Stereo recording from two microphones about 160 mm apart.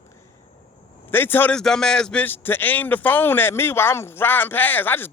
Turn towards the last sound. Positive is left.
turn(degrees=10)  # may be behind; listen again after turning